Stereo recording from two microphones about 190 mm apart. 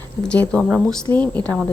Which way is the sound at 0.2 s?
5° left (ahead or behind).